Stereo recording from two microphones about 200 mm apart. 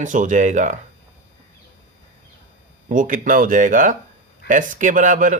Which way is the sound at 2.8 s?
40° right (ahead or behind).